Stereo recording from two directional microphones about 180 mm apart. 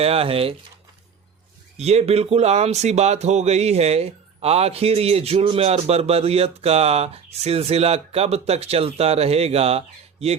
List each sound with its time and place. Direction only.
0.0 s speech: 35° right (ahead or behind)
1.8 s speech: 35° right (ahead or behind)